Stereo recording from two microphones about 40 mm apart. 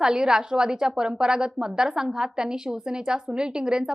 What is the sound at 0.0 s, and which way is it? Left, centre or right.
A woman's voice, centre.